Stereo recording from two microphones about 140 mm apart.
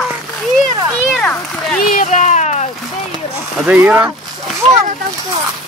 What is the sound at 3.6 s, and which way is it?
Speech, 10° right (ahead or behind).